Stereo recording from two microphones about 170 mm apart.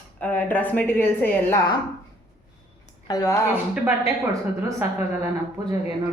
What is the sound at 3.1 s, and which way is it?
Speech, 20° left (ahead or behind).